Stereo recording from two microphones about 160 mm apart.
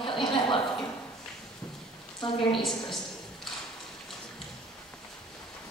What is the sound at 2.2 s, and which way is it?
Speech, 30° left (ahead or behind).